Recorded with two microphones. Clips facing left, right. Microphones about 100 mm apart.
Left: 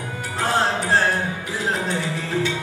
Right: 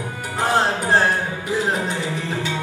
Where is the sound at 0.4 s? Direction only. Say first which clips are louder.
Right 2 dB; 15° right (ahead or behind).